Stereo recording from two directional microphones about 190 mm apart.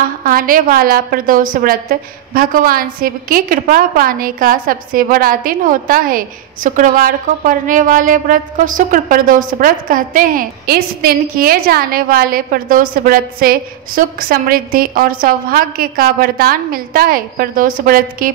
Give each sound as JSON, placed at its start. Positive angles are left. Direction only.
{"t": 0.2, "sound": "a woman's voice", "side_deg": -50}